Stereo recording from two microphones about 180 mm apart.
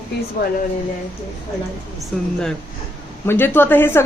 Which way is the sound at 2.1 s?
5° left (ahead or behind).